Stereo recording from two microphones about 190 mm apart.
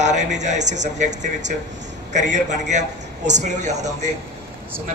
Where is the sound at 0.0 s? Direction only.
40° right (ahead or behind).